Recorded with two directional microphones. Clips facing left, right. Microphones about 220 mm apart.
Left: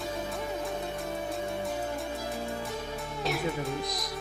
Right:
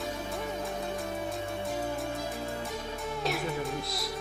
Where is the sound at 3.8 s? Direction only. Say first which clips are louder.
Even; 15° left (ahead or behind).